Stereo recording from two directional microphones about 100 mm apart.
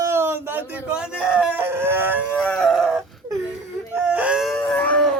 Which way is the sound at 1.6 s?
25° right (ahead or behind).